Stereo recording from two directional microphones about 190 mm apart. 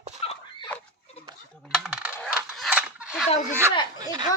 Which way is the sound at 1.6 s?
5° right (ahead or behind).